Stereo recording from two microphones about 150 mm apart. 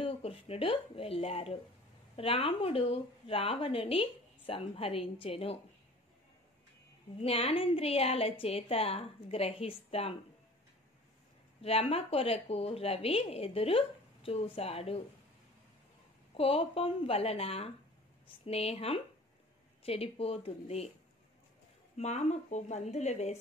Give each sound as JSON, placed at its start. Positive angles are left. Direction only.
{"t": 0.0, "sound": "a woman's voice", "side_deg": 40}
{"t": 7.2, "sound": "a woman's voice", "side_deg": 40}
{"t": 11.6, "sound": "a woman's voice", "side_deg": 40}
{"t": 16.3, "sound": "a woman's voice", "side_deg": 40}
{"t": 21.9, "sound": "speech", "side_deg": 50}